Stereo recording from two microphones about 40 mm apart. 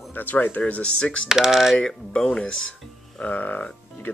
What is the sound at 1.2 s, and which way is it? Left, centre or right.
Speech, centre.